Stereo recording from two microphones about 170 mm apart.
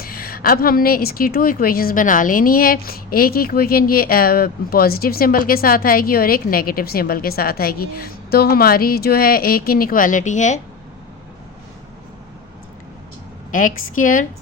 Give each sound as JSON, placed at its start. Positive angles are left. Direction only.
{"t": 0.0, "sound": "a woman's voice", "side_deg": 60}
{"t": 13.5, "sound": "a woman's voice", "side_deg": 50}